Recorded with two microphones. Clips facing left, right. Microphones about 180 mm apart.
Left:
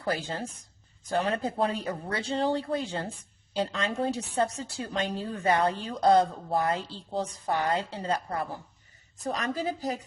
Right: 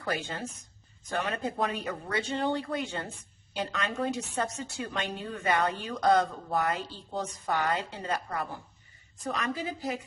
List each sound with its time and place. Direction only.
0.0 s speech: 35° left (ahead or behind)